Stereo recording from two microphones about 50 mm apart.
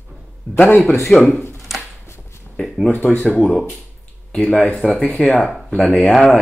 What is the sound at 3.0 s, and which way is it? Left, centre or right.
Speech, left.